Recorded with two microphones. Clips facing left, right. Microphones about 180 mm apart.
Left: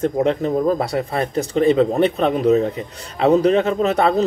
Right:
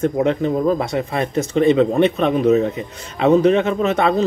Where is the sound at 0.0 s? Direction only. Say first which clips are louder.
Right 1 dB; 35° left (ahead or behind).